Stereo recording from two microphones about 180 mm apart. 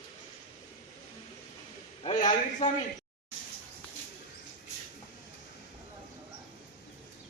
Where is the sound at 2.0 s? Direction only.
45° left (ahead or behind).